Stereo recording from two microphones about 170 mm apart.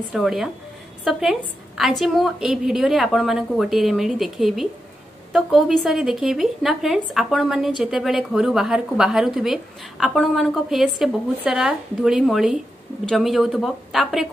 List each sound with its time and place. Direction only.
0.1 s speech: centre (ahead or behind)